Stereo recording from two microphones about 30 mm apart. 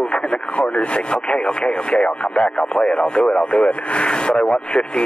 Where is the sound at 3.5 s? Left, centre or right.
Left.